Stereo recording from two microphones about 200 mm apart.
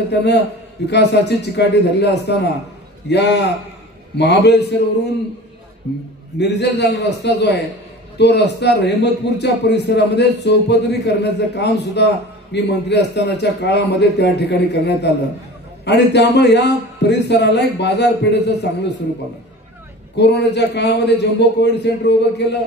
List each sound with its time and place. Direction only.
0.1 s a man's voice: 60° left (ahead or behind)
6.3 s a man's voice: 60° left (ahead or behind)
20.2 s a man's voice: 60° left (ahead or behind)